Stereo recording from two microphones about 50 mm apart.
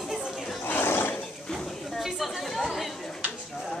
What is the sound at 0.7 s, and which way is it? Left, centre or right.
Roaring cats, left.